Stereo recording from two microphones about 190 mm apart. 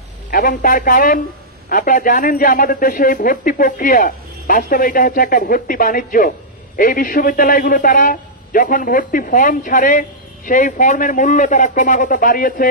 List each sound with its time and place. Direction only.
0.3 s a man's voice: 45° left (ahead or behind)